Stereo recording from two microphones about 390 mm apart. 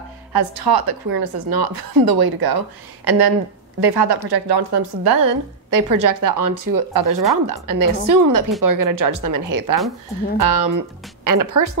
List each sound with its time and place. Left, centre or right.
0.3 s a woman's voice: right